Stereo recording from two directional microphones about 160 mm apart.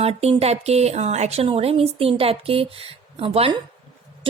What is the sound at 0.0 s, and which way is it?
A woman's voice, 40° right (ahead or behind).